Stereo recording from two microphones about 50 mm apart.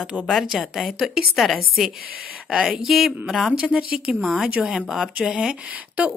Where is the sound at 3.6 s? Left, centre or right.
Right.